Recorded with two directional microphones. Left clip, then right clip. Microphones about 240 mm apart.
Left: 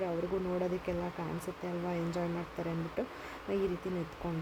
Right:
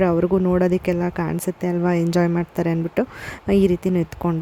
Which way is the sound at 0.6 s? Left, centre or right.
Right.